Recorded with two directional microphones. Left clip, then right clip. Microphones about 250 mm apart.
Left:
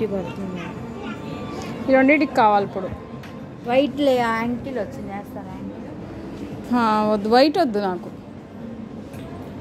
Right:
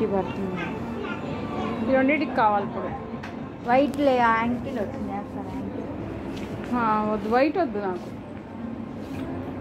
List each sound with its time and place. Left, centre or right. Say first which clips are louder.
1.9 s a woman's voice: left 6 dB; left
3.6 s a woman's voice: left 2 dB; left
6.7 s a woman's voice: left 5 dB; left